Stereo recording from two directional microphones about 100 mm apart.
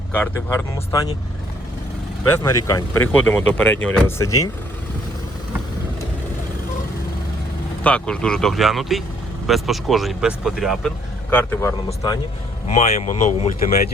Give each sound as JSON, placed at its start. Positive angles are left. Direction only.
{"t": 0.5, "sound": "speech", "side_deg": 35}
{"t": 2.2, "sound": "speech", "side_deg": 30}
{"t": 3.0, "sound": "speech", "side_deg": 15}
{"t": 4.0, "sound": "speech", "side_deg": 30}
{"t": 7.9, "sound": "speech", "side_deg": 10}
{"t": 10.8, "sound": "speech", "side_deg": 15}
{"t": 12.6, "sound": "speech", "side_deg": 90}